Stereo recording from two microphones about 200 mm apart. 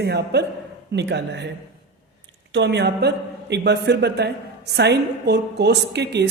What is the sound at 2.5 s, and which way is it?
A man's voice, 60° right (ahead or behind).